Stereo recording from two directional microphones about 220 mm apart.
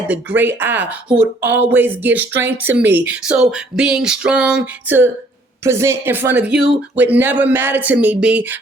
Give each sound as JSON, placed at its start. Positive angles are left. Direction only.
{"t": 0.1, "sound": "speech", "side_deg": -10}